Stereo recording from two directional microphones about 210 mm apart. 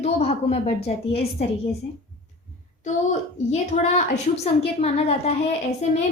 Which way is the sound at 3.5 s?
30° left (ahead or behind).